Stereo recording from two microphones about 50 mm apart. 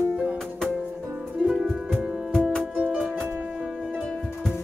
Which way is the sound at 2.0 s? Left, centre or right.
Centre.